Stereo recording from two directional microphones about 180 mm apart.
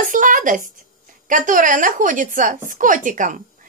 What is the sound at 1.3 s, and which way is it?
A woman's voice, 45° right (ahead or behind).